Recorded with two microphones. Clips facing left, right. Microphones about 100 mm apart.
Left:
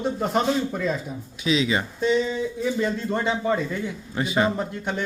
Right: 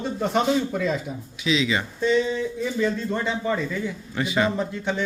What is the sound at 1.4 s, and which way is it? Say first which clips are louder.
Speech: left 1 dB; 40° left (ahead or behind).